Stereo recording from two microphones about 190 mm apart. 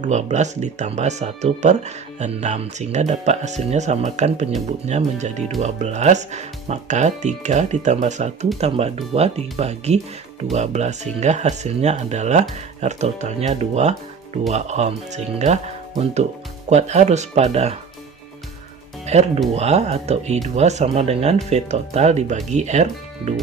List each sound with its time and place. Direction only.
0.0 s speech: 40° right (ahead or behind)
19.0 s speech: 35° right (ahead or behind)